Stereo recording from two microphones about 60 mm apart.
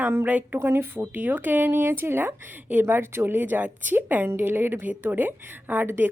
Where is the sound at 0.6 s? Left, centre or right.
Right.